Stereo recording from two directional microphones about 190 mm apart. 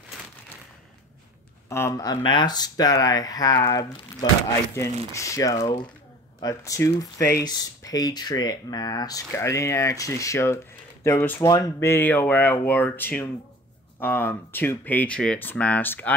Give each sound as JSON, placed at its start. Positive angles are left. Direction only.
{"t": 1.7, "sound": "speech", "side_deg": 15}